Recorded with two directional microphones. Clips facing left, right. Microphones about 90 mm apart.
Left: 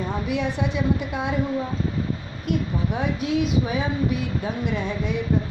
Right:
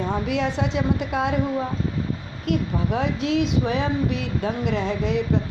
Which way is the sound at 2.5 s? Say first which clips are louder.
Right 2 dB; 90° right.